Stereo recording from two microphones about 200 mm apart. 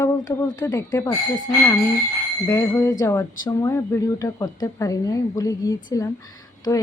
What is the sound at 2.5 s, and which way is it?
A woman's voice, 15° left (ahead or behind).